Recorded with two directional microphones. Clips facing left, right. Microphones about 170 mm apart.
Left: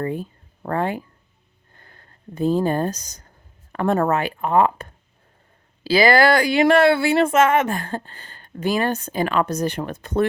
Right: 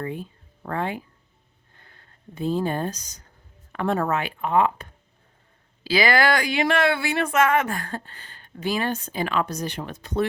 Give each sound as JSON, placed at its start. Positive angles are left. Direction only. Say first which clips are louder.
{"t": 0.0, "sound": "speech", "louder": "left 5 dB", "side_deg": 40}